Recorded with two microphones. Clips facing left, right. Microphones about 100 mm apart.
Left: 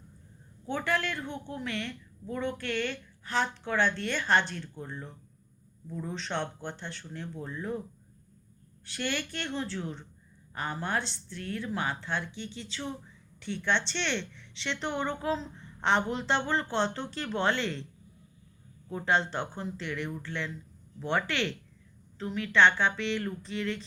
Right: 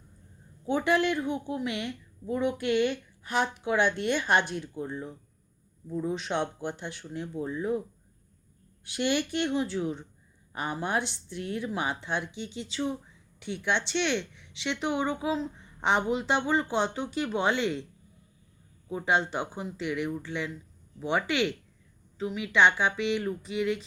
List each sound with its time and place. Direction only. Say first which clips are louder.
0.6 s a woman's voice: right 5 dB; 15° right (ahead or behind)
18.9 s a woman's voice: right 1 dB; 10° right (ahead or behind)